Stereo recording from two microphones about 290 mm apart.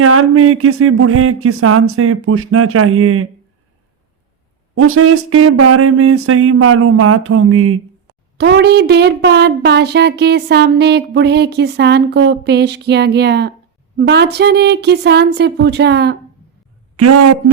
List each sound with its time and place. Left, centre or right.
0.0 s speech: right
4.7 s speech: right
8.4 s speech: right
17.0 s a man's voice: right